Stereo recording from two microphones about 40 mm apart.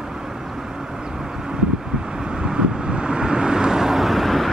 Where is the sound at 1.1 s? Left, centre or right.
Centre.